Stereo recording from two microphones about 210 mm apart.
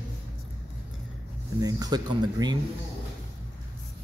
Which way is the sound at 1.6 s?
20° right (ahead or behind).